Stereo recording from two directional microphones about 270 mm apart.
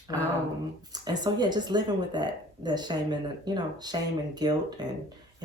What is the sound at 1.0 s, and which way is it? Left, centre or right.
Speech, centre.